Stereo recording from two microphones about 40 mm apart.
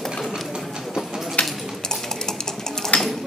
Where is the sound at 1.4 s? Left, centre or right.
Left.